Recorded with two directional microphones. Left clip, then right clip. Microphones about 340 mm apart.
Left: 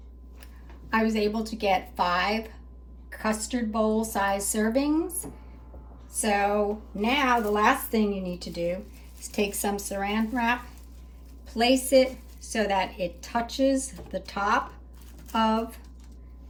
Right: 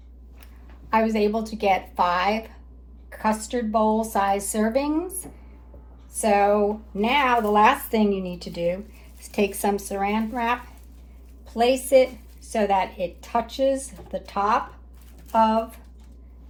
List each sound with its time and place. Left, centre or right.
0.9 s speech: centre